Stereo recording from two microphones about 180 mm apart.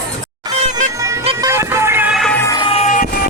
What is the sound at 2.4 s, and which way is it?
Music, 20° left (ahead or behind).